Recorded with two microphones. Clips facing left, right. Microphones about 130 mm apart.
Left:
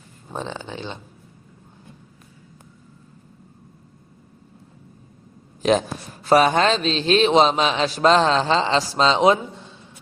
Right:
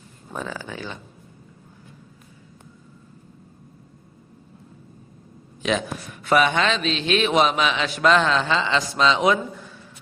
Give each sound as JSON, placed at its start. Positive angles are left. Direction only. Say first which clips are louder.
{"t": 0.3, "sound": "speech", "louder": "left 1 dB", "side_deg": 25}
{"t": 5.6, "sound": "a man's voice", "louder": "left 5 dB", "side_deg": 35}